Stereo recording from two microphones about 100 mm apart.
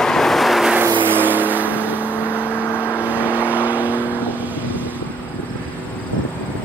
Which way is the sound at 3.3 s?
15° right (ahead or behind).